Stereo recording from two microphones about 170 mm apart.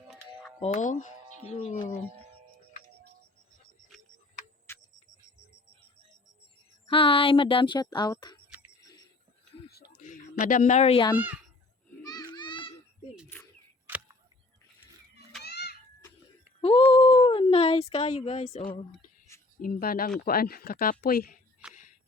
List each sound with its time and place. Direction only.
0.6 s speech: 45° left (ahead or behind)
1.5 s speech: 35° left (ahead or behind)
4.7 s a sound: 15° left (ahead or behind)
6.8 s speech: 30° left (ahead or behind)
9.7 s a sound: 65° left (ahead or behind)
10.4 s speech: 50° left (ahead or behind)
12.0 s children playing: 25° left (ahead or behind)
13.8 s a sound: 10° right (ahead or behind)
15.4 s chicken: 70° left (ahead or behind)
16.6 s speech: 30° left (ahead or behind)
19.3 s a sound: 15° left (ahead or behind)
19.6 s speech: 60° left (ahead or behind)